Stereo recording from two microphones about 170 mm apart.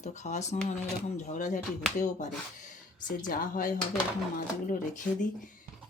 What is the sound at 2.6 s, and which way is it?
Speech, 50° left (ahead or behind).